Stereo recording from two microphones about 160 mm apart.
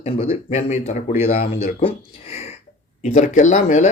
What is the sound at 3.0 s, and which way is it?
Speech, 50° left (ahead or behind).